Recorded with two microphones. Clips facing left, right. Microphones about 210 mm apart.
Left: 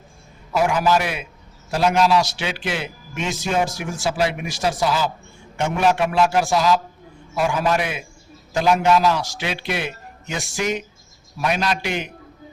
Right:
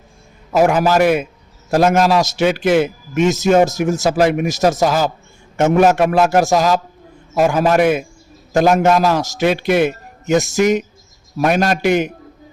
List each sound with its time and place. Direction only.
0.5 s a man's voice: 45° right (ahead or behind)